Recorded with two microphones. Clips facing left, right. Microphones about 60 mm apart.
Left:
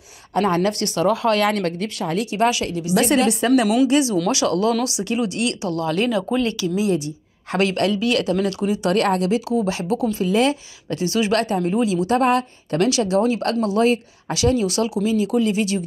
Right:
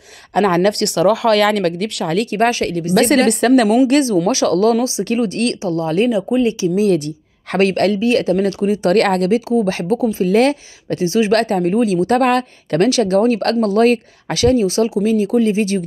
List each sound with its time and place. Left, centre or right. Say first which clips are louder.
0.3 s speech: right 5 dB; right
2.3 s speech: right 2 dB; right
3.8 s speech: right 4 dB; right
5.6 s speech: right 5 dB; right
7.5 s speech: right 5 dB; right
8.0 s speech: right 5 dB; right
8.9 s speech: right 4 dB; right
9.3 s speech: right 5 dB; right
9.7 s speech: right 4 dB; right
11.0 s speech: right 5 dB; right
11.3 s speech: right 5 dB; right
11.6 s speech: right 5 dB; right
12.2 s speech: right 3 dB; right
14.6 s speech: right 5 dB; right